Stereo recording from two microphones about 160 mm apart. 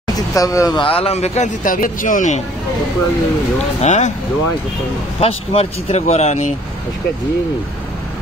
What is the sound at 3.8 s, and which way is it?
Speech, 45° left (ahead or behind).